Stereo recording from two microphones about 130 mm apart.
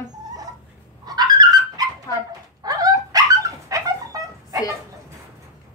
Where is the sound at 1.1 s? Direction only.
30° right (ahead or behind).